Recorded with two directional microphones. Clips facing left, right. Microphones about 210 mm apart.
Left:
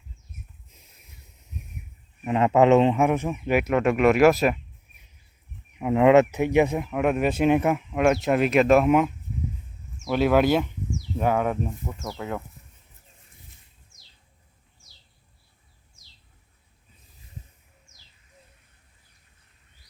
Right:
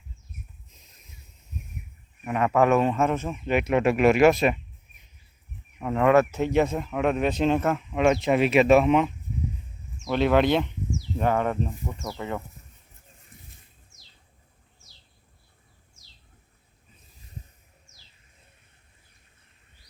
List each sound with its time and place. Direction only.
2.2 s speech: 25° left (ahead or behind); by 3.7 s 10° left (ahead or behind)
3.7 s speech: 5° right (ahead or behind)
5.8 s speech: 15° left (ahead or behind)